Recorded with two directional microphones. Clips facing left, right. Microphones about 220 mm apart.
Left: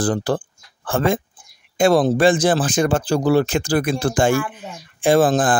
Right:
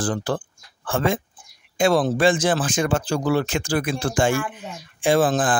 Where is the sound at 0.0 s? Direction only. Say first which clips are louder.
Left 4 dB; 35° left (ahead or behind).